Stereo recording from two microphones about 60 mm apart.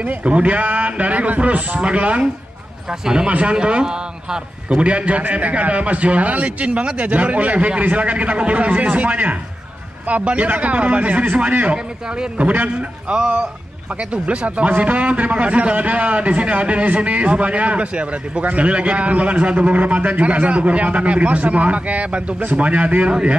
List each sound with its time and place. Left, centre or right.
0.0 s a man's voice: right